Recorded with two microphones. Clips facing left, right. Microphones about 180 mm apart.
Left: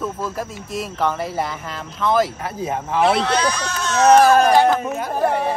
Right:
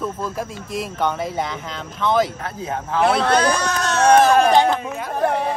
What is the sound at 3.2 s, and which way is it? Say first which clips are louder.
Speech: right 2 dB; 50° right (ahead or behind).